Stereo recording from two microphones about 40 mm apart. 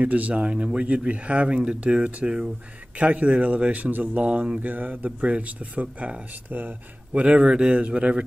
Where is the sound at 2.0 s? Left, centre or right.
Right.